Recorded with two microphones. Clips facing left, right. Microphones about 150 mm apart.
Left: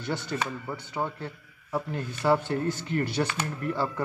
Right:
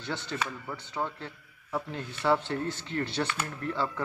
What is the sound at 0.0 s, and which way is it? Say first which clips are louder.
Speech: left 3 dB; 10° left (ahead or behind).